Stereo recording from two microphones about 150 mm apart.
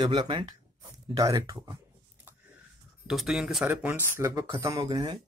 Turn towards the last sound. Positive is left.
turn(degrees=-25)  # may be behind; listen again after turning